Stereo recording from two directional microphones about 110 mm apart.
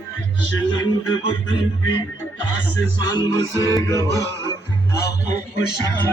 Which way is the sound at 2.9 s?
40° left (ahead or behind).